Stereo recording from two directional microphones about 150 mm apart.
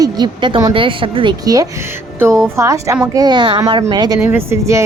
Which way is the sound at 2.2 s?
20° right (ahead or behind).